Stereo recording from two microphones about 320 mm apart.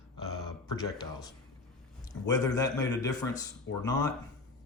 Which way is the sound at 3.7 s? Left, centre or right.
Left.